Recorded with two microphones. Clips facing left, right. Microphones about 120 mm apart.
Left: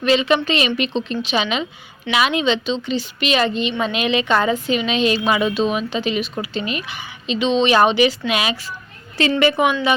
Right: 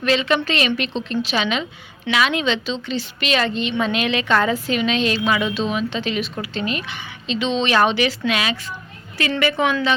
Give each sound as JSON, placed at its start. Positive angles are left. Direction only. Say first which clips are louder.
{"t": 0.0, "sound": "a woman's voice", "louder": "left 2 dB", "side_deg": 5}
{"t": 9.2, "sound": "a woman's voice", "louder": "left 5 dB", "side_deg": 25}
{"t": 9.6, "sound": "speech", "louder": "even", "side_deg": 15}